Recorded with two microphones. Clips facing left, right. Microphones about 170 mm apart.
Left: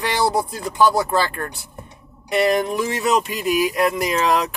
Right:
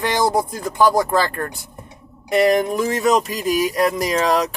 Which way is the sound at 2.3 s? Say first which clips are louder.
Right 2 dB; 45° right (ahead or behind).